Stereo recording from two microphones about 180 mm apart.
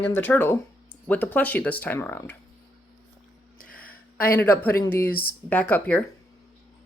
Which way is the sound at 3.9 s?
55° left (ahead or behind).